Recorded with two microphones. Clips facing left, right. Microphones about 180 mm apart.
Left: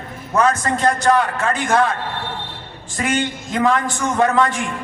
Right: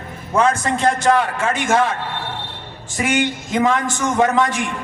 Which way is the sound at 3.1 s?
20° right (ahead or behind).